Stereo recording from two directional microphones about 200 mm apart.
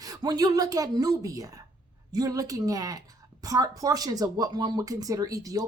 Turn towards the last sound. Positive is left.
turn(degrees=-15)  # may be behind; listen again after turning